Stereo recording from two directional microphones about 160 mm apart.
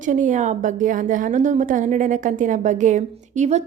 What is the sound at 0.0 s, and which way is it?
A woman's voice, 55° right (ahead or behind).